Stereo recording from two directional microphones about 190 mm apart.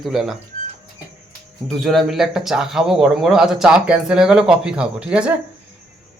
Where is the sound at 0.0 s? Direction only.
Centre (ahead or behind).